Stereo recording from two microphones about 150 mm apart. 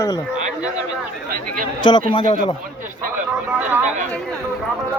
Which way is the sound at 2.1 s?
30° left (ahead or behind).